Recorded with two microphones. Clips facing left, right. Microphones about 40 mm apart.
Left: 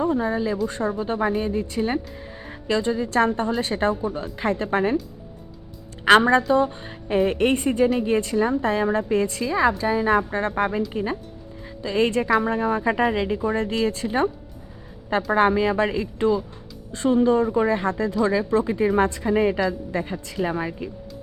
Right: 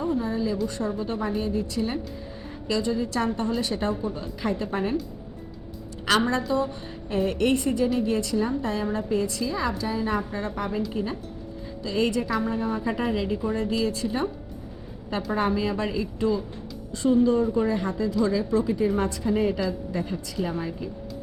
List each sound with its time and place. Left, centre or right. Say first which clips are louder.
0.0 s a woman's voice: left 4 dB; left
6.1 s a woman's voice: left 8 dB; left
10.3 s a woman's voice: left 6 dB; left
10.9 s a woman's voice: left 3 dB; left
12.5 s a woman's voice: left 5 dB; left
15.3 s a woman's voice: left 6 dB; left